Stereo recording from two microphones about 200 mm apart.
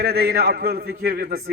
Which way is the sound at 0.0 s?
50° right (ahead or behind).